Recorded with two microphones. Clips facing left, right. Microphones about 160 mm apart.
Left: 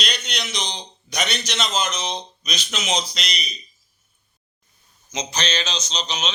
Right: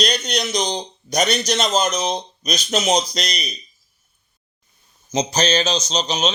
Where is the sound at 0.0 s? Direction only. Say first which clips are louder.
Right 8 dB; 40° right (ahead or behind).